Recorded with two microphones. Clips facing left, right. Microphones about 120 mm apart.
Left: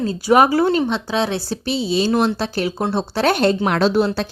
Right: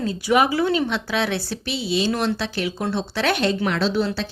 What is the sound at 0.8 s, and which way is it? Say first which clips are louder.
Speech: left 3 dB; 30° left (ahead or behind).